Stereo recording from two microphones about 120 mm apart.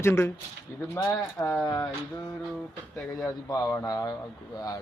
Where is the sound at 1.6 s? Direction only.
25° left (ahead or behind).